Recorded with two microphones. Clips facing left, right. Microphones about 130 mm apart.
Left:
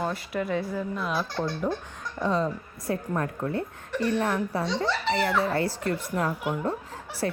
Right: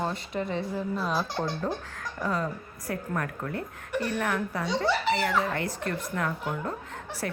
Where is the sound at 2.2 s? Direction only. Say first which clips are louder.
Left 4 dB; 25° left (ahead or behind).